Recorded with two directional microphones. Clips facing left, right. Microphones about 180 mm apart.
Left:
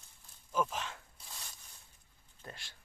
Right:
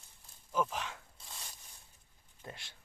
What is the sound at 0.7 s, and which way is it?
Speech, 15° right (ahead or behind).